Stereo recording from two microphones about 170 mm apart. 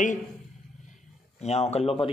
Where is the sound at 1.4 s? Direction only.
40° left (ahead or behind).